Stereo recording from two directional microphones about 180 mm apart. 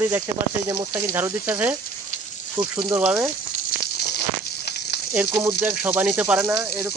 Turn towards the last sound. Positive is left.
turn(degrees=-10)  # may be behind; listen again after turning